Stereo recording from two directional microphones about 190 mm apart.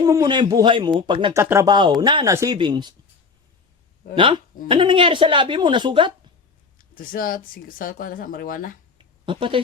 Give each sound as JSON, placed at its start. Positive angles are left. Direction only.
{"t": 0.0, "sound": "a woman's voice", "side_deg": -20}
{"t": 1.4, "sound": "a woman's voice", "side_deg": -15}
{"t": 4.1, "sound": "a woman's voice", "side_deg": -25}
{"t": 6.7, "sound": "speech", "side_deg": 50}
{"t": 9.0, "sound": "a sound", "side_deg": -25}